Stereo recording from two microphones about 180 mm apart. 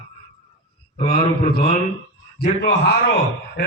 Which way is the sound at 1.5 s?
45° left (ahead or behind).